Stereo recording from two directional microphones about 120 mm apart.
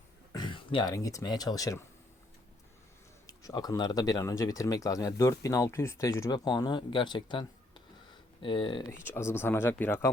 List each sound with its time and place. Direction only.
0.3 s a sound: 40° left (ahead or behind)
0.9 s speech: 30° left (ahead or behind)
3.2 s speech: 30° left (ahead or behind)
8.9 s speech: 20° left (ahead or behind)